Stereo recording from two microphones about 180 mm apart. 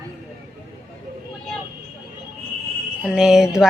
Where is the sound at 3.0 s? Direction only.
5° right (ahead or behind).